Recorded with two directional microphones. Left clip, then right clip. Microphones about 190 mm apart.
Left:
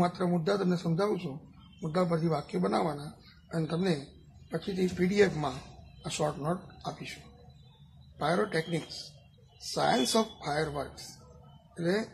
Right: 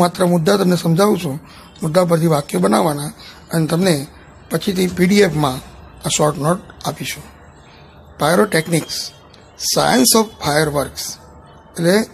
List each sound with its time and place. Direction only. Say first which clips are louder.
0.0 s speech: right 15 dB; 40° right (ahead or behind)
8.2 s speech: right 15 dB; 40° right (ahead or behind)